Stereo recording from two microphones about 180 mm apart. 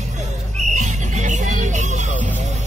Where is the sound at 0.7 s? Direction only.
40° right (ahead or behind).